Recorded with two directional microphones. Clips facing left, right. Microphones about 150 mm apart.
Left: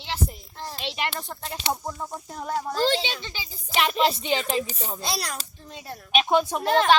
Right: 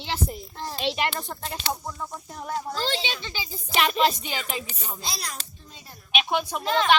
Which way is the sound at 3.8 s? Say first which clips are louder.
Even; 25° left (ahead or behind).